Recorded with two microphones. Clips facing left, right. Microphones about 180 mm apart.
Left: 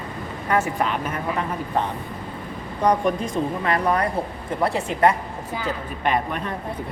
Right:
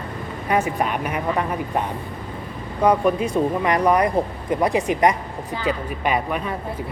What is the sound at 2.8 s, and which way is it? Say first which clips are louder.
Speech: right 3 dB; 5° right (ahead or behind).